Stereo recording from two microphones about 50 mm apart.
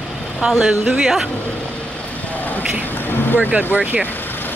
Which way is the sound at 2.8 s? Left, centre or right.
Left.